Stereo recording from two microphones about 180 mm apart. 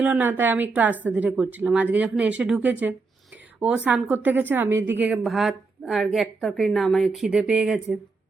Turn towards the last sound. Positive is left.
turn(degrees=-5)  # may be behind; listen again after turning